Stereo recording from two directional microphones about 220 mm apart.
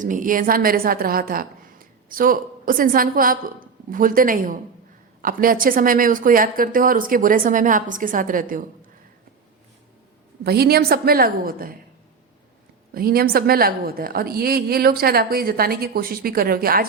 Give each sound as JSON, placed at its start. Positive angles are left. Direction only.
{"t": 0.0, "sound": "a woman's voice", "side_deg": -35}
{"t": 10.4, "sound": "a woman's voice", "side_deg": -45}
{"t": 12.9, "sound": "a woman's voice", "side_deg": -40}